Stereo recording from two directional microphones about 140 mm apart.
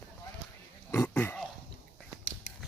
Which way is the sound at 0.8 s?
15° left (ahead or behind).